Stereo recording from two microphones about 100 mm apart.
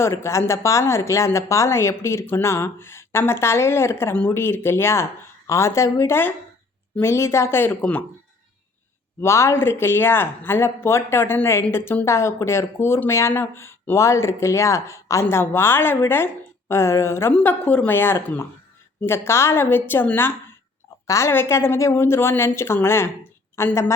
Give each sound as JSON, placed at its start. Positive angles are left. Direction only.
{"t": 0.0, "sound": "speech", "side_deg": 25}
{"t": 9.2, "sound": "speech", "side_deg": 30}
{"t": 17.3, "sound": "speech", "side_deg": 15}